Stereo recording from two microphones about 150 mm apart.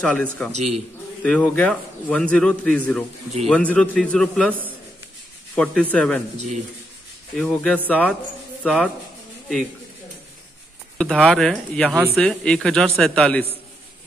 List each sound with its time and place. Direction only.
0.0 s a man's voice: 10° left (ahead or behind)
0.5 s a man's voice: 45° right (ahead or behind)
1.2 s a man's voice: 10° left (ahead or behind)
5.6 s a man's voice: 5° left (ahead or behind)
6.3 s a man's voice: 50° right (ahead or behind)
7.3 s a man's voice: centre (ahead or behind)
11.0 s a man's voice: 5° left (ahead or behind)